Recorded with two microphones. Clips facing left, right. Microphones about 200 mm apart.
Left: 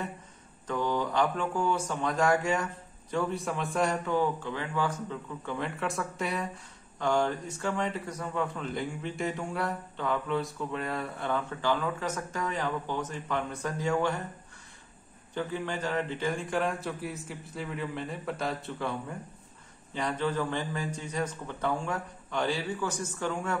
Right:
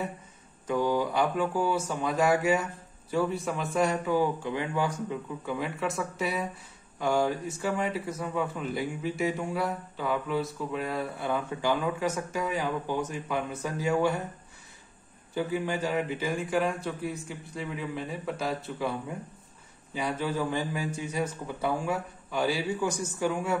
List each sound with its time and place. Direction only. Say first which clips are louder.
0.7 s speech: right 3 dB; 10° right (ahead or behind)
15.3 s a man's voice: right 3 dB; 10° right (ahead or behind)